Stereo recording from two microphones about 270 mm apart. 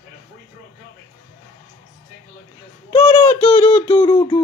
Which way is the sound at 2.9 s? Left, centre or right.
Centre.